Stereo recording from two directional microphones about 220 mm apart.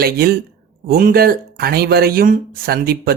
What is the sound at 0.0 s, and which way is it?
Speech, 45° right (ahead or behind).